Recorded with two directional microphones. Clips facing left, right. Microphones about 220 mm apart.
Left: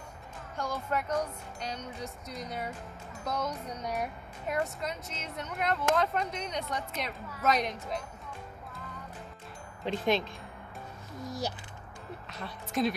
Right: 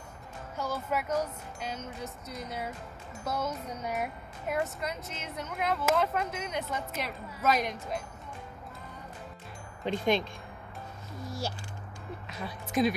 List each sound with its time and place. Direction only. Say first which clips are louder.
0.6 s speech: right 1 dB; 5° right (ahead or behind)
9.8 s speech: right 1 dB; centre (ahead or behind)
11.2 s speech: left 1 dB; 20° left (ahead or behind)
12.3 s speech: right 2 dB; 5° right (ahead or behind)